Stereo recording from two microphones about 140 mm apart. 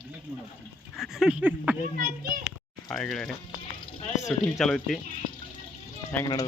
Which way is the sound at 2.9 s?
5° left (ahead or behind).